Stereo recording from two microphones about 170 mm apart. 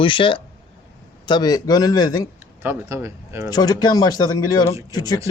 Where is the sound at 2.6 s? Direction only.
15° right (ahead or behind).